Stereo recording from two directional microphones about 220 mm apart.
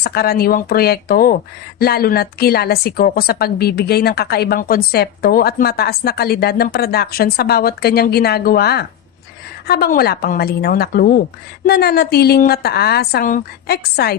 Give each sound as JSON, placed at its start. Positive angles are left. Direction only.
{"t": 0.0, "sound": "speech", "side_deg": 45}